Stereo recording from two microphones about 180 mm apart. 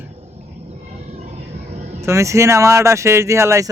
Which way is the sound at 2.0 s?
15° right (ahead or behind).